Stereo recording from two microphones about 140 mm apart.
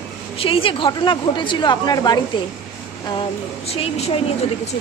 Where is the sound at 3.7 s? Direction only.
45° left (ahead or behind).